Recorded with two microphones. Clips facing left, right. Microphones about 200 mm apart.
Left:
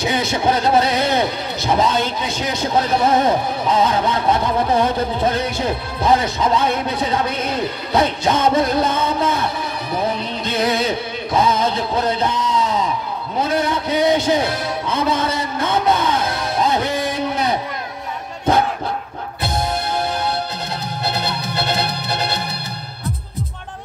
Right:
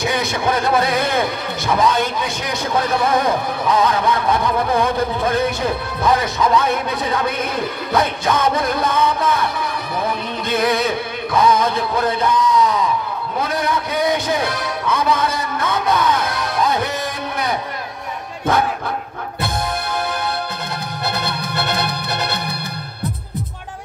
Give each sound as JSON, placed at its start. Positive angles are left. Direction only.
{"t": 0.7, "sound": "speech", "side_deg": 25}
{"t": 10.6, "sound": "music", "side_deg": 25}
{"t": 13.4, "sound": "a man's voice", "side_deg": 25}
{"t": 21.0, "sound": "music", "side_deg": -50}